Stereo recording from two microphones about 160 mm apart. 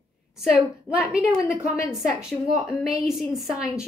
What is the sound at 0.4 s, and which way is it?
A woman's voice, 5° right (ahead or behind).